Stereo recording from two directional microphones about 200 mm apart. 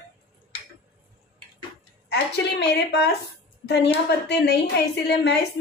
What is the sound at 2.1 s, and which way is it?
A woman's voice, 55° left (ahead or behind).